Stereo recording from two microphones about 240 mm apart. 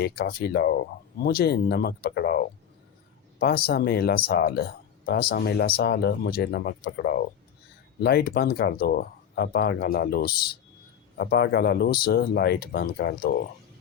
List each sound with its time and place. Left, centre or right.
0.0 s speech: left
3.4 s speech: left